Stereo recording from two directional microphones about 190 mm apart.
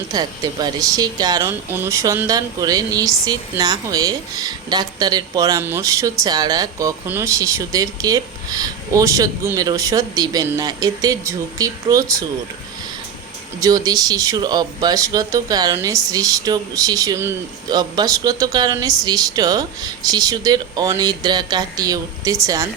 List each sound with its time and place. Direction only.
0.1 s speech: 20° right (ahead or behind)
13.6 s speech: 20° right (ahead or behind)